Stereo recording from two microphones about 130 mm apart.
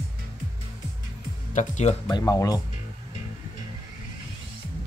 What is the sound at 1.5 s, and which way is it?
Speech, 65° left (ahead or behind).